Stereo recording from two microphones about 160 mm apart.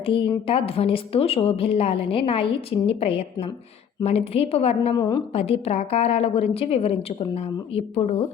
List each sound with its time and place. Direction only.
0.0 s a woman's voice: 35° left (ahead or behind)
4.9 s a woman's voice: 25° left (ahead or behind)
5.3 s a woman's voice: 40° left (ahead or behind)